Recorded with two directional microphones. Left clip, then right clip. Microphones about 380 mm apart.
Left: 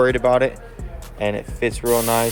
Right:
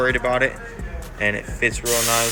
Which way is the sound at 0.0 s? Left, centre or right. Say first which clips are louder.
Left 3 dB; centre.